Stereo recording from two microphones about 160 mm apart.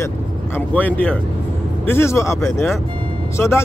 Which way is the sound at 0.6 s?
10° left (ahead or behind).